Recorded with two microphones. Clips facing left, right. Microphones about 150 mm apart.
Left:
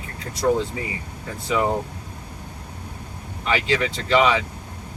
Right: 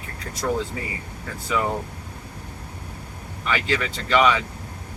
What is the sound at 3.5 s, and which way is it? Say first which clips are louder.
Speech: left 3 dB; 25° left (ahead or behind).